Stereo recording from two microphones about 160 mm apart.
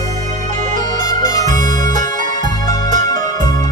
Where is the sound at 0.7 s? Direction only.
55° right (ahead or behind).